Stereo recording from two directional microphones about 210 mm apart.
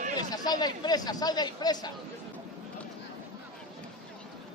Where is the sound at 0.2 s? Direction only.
20° left (ahead or behind).